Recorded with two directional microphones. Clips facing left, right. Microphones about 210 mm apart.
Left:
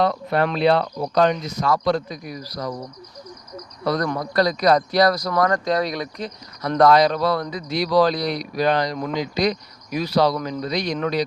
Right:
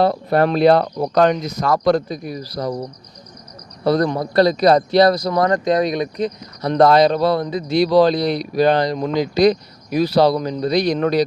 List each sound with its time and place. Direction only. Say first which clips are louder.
0.0 s speech: right 4 dB; 35° right (ahead or behind)
2.0 s speech: right 6 dB; 30° right (ahead or behind)
3.8 s a man's voice: right 6 dB; 30° right (ahead or behind)